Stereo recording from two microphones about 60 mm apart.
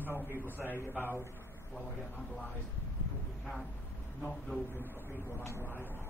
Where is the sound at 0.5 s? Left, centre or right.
Left.